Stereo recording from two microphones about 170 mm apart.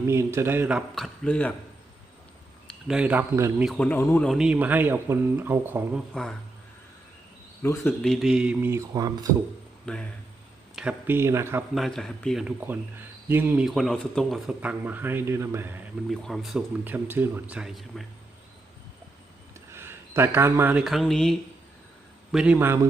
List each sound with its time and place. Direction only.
0.0 s speech: 15° right (ahead or behind)
0.9 s speech: 5° left (ahead or behind)
2.6 s speech: 5° right (ahead or behind)
3.6 s a man's voice: 5° left (ahead or behind)
4.3 s speech: 5° right (ahead or behind)
7.6 s a man's voice: 15° left (ahead or behind)
8.0 s speech: centre (ahead or behind); by 9.2 s 20° right (ahead or behind)
9.8 s speech: 5° left (ahead or behind)
10.8 s speech: 10° right (ahead or behind)
11.7 s speech: centre (ahead or behind)
16.0 s speech: centre (ahead or behind)
19.7 s speech: 15° right (ahead or behind)